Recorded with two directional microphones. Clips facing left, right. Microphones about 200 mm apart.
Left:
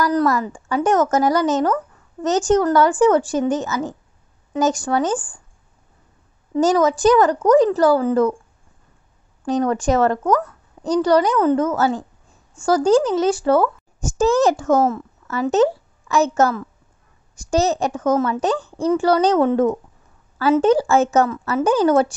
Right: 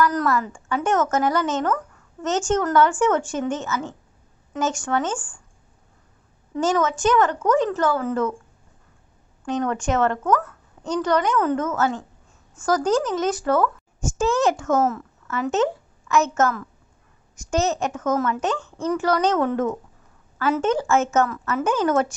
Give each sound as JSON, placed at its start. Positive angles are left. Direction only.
{"t": 0.0, "sound": "a woman's voice", "side_deg": 35}
{"t": 6.5, "sound": "a woman's voice", "side_deg": 35}
{"t": 9.4, "sound": "a woman's voice", "side_deg": 35}